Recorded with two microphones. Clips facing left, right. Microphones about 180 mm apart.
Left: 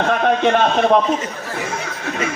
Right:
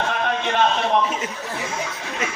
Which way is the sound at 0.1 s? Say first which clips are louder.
Left 8 dB; 55° left (ahead or behind).